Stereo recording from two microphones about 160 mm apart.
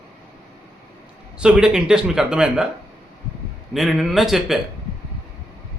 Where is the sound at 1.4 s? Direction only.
5° right (ahead or behind).